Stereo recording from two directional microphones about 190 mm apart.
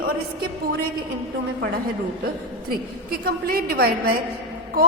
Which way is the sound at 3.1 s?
50° right (ahead or behind).